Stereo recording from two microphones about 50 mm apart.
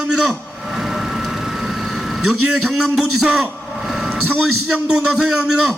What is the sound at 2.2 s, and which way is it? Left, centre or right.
A man's voice, centre.